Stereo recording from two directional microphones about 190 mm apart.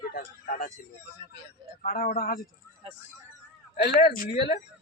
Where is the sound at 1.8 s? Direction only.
50° left (ahead or behind).